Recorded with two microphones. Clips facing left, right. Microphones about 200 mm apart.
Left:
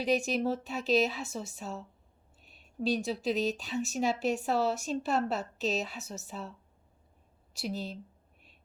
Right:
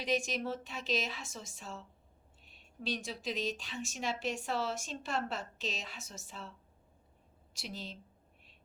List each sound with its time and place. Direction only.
0.0 s speech: 40° left (ahead or behind)
2.9 s speech: 40° left (ahead or behind)
7.5 s speech: 40° left (ahead or behind)